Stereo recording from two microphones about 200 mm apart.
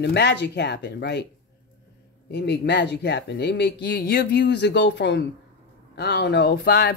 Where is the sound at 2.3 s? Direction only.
55° left (ahead or behind).